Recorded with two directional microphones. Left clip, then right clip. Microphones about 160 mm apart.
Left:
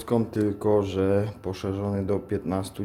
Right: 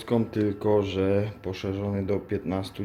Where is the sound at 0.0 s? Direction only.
Centre (ahead or behind).